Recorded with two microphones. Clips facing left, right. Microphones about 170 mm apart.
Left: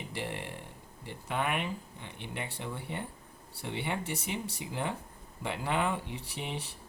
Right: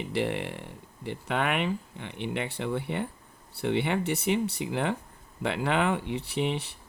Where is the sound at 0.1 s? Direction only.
70° right (ahead or behind).